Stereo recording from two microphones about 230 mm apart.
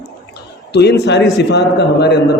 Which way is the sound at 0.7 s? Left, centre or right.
Left.